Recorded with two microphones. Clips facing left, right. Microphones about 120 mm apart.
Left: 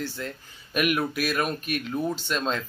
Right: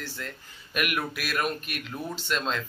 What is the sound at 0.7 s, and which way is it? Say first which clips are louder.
Speech: left 5 dB; 30° left (ahead or behind).